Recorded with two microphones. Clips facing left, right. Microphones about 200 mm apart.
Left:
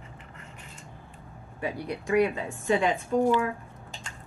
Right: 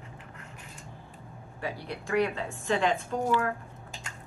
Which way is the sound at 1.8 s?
15° left (ahead or behind).